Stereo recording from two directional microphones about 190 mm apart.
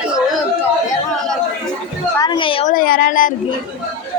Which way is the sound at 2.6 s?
50° left (ahead or behind).